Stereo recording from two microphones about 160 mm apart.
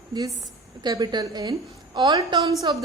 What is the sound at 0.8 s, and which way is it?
A woman's voice, 25° right (ahead or behind).